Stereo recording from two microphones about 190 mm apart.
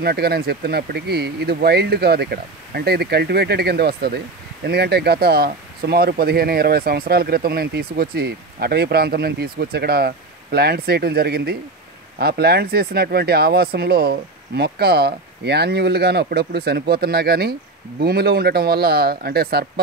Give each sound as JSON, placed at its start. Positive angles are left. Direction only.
{"t": 0.0, "sound": "speech", "side_deg": -55}